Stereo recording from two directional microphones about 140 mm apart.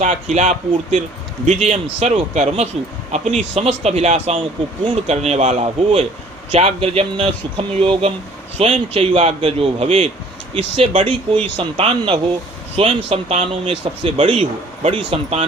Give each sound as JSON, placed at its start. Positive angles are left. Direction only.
{"t": 0.0, "sound": "speech", "side_deg": -55}